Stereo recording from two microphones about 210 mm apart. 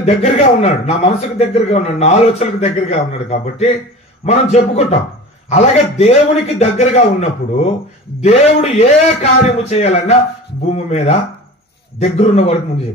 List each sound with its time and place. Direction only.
0.0 s a man's voice: 30° left (ahead or behind)